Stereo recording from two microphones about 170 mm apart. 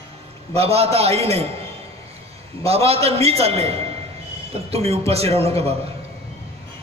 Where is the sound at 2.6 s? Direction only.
35° right (ahead or behind).